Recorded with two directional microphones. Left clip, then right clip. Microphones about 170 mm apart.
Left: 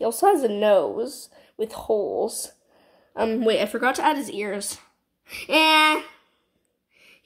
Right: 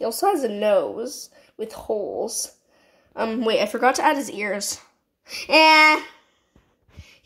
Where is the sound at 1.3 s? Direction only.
45° right (ahead or behind).